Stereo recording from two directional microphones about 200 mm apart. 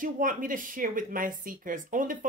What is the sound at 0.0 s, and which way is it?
Speech, 45° right (ahead or behind).